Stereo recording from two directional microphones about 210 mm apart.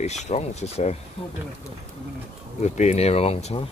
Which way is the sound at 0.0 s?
30° left (ahead or behind).